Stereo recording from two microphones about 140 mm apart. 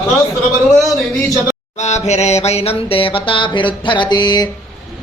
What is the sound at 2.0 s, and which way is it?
Mantra, 55° left (ahead or behind).